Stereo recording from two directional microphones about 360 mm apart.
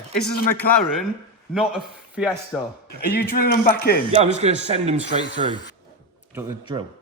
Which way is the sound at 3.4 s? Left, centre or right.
Left.